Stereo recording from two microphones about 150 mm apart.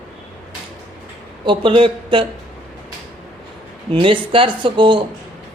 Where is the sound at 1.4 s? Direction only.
35° right (ahead or behind).